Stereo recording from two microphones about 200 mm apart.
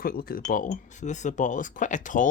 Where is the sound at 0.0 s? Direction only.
45° left (ahead or behind).